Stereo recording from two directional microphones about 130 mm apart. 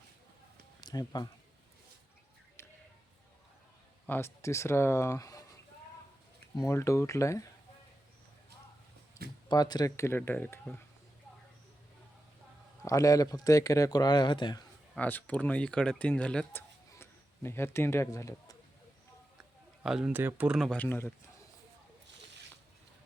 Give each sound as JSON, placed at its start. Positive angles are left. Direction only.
{"t": 0.8, "sound": "speech", "side_deg": 30}
{"t": 2.6, "sound": "a sound", "side_deg": 20}
{"t": 4.0, "sound": "speech", "side_deg": 15}
{"t": 6.6, "sound": "speech", "side_deg": 20}
{"t": 9.5, "sound": "speech", "side_deg": 30}
{"t": 12.8, "sound": "speech", "side_deg": 25}
{"t": 14.9, "sound": "speech", "side_deg": 10}
{"t": 16.5, "sound": "a sound", "side_deg": 20}
{"t": 19.4, "sound": "speech", "side_deg": -5}
{"t": 20.6, "sound": "speech", "side_deg": 5}
{"t": 20.8, "sound": "speech", "side_deg": 15}